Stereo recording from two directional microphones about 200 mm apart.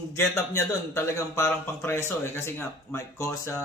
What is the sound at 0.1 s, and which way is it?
A man's voice, 15° left (ahead or behind).